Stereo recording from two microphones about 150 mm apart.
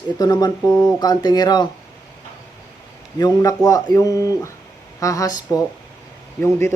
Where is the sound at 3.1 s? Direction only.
25° left (ahead or behind).